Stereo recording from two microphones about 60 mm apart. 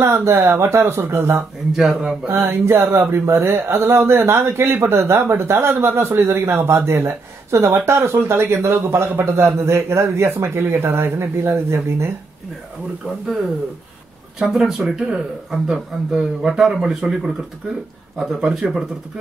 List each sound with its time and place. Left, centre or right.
0.0 s speech: right
1.8 s a man's voice: centre
2.2 s speech: right
4.5 s speech: right
13.0 s speech: centre
14.5 s a man's voice: centre